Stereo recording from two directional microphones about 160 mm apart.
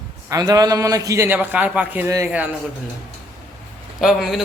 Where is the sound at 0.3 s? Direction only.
25° right (ahead or behind).